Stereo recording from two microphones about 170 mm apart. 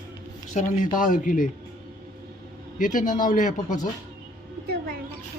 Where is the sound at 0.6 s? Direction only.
45° left (ahead or behind).